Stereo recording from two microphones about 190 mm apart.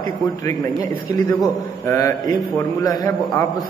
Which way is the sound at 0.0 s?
15° left (ahead or behind).